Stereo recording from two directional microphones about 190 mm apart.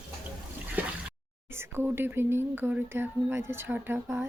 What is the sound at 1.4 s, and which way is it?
Speech, 10° right (ahead or behind).